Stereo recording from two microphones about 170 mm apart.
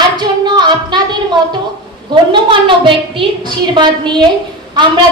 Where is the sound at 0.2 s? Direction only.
25° right (ahead or behind).